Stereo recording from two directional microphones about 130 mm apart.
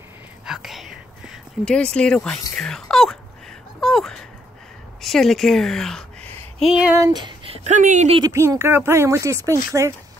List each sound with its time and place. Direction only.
0.5 s whispering: centre (ahead or behind)
2.5 s a sound: 5° left (ahead or behind)
5.0 s a woman's voice: centre (ahead or behind)
7.0 s a sound: 35° right (ahead or behind)
7.7 s speech: 75° right (ahead or behind)
8.2 s speech: 20° right (ahead or behind)